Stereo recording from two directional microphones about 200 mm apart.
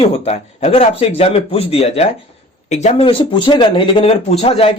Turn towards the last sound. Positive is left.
turn(degrees=30)  # may be behind; listen again after turning